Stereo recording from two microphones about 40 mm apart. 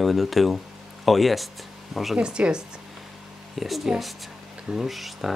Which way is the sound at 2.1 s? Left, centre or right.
Right.